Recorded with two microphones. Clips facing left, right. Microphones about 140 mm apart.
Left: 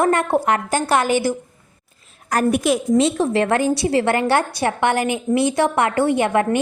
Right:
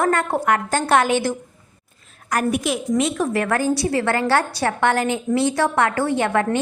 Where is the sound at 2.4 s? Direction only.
50° left (ahead or behind).